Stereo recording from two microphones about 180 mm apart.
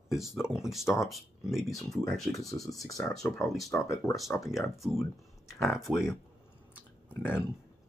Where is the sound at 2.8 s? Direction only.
20° left (ahead or behind).